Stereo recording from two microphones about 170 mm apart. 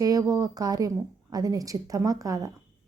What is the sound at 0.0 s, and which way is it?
A woman's voice, 20° right (ahead or behind).